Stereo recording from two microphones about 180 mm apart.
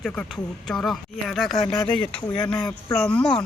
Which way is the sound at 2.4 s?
5° left (ahead or behind).